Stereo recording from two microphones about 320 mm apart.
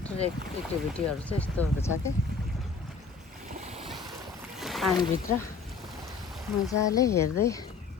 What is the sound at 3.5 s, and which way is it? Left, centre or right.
Boat, centre.